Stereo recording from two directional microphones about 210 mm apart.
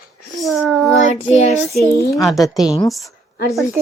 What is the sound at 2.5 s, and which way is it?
Speech, centre (ahead or behind).